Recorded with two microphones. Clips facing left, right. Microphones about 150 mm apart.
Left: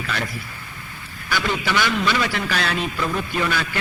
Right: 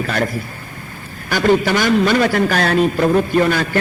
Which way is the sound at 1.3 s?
45° right (ahead or behind).